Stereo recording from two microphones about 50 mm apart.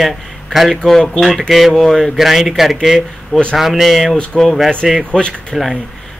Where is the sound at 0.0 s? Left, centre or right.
Centre.